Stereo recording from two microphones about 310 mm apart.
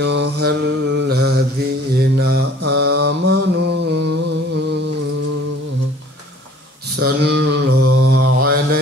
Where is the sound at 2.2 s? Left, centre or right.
Right.